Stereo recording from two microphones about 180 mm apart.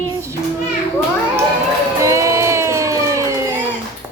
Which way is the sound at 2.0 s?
15° right (ahead or behind).